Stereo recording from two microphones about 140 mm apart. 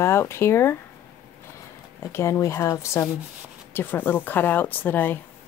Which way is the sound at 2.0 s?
20° left (ahead or behind).